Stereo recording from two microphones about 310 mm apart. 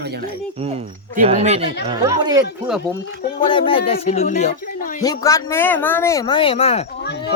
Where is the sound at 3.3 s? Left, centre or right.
Centre.